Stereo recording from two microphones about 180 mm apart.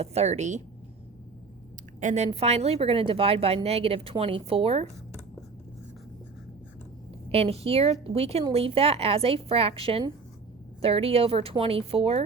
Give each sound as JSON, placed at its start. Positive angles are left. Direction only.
{"t": 0.0, "sound": "speech", "side_deg": -35}
{"t": 2.0, "sound": "speech", "side_deg": -40}
{"t": 7.3, "sound": "speech", "side_deg": -35}